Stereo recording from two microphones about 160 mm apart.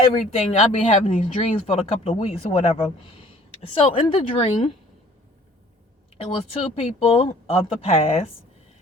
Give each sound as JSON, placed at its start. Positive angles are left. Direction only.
{"t": 0.0, "sound": "speech", "side_deg": 35}
{"t": 6.1, "sound": "speech", "side_deg": 40}